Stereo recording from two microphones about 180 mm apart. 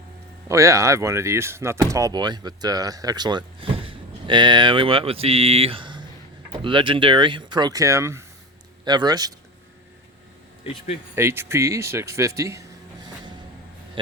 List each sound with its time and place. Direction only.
0.4 s speech: 15° right (ahead or behind)
10.6 s speech: 35° left (ahead or behind)
11.1 s speech: 15° right (ahead or behind)